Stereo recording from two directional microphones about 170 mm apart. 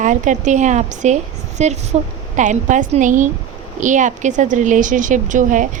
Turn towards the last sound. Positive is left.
turn(degrees=-50)  # may be behind; listen again after turning